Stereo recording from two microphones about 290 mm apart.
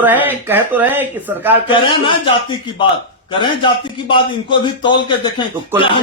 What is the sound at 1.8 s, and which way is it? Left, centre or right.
A man's voice, centre.